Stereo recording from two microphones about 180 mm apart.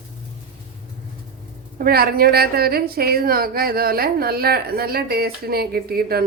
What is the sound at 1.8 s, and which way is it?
A woman's voice, 55° right (ahead or behind).